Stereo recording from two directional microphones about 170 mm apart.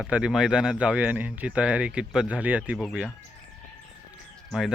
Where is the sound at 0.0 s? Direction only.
5° right (ahead or behind).